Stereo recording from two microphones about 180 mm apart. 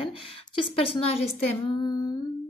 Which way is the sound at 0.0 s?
30° left (ahead or behind).